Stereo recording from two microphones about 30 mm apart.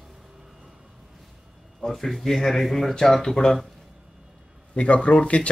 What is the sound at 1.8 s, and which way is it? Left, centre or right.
Speech, centre.